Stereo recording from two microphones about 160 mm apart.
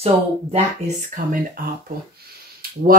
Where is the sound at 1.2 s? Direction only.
60° right (ahead or behind).